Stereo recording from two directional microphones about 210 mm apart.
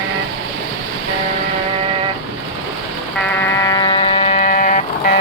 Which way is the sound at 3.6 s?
20° left (ahead or behind).